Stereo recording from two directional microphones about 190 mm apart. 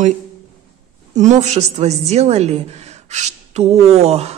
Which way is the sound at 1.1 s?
40° right (ahead or behind).